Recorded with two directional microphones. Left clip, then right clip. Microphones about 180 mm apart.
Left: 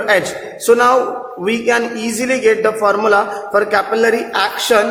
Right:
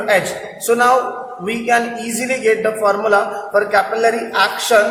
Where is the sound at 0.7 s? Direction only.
40° left (ahead or behind).